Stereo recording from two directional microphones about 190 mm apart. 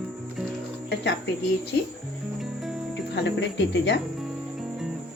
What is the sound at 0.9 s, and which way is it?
Speech, 65° left (ahead or behind).